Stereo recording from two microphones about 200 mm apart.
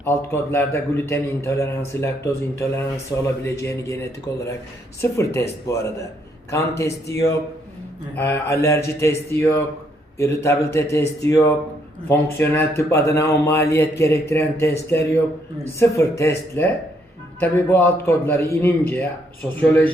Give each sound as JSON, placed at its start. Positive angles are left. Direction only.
{"t": 0.0, "sound": "a man's voice", "side_deg": 10}
{"t": 17.4, "sound": "a man's voice", "side_deg": 10}